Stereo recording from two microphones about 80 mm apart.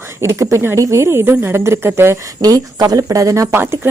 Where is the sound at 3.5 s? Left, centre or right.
Right.